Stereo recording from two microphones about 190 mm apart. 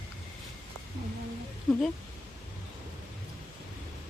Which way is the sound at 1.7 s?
5° left (ahead or behind).